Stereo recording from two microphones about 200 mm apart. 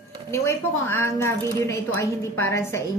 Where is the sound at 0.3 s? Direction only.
15° left (ahead or behind).